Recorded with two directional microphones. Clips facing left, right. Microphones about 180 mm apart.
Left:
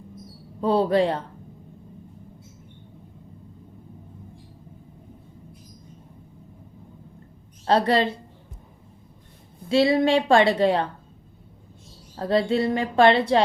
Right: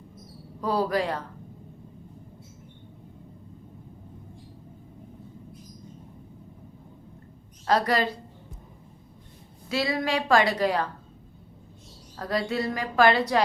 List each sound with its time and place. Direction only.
0.6 s a woman's voice: 25° left (ahead or behind)
7.6 s a woman's voice: 30° left (ahead or behind)
9.6 s a woman's voice: 30° left (ahead or behind)
12.1 s a woman's voice: 25° left (ahead or behind)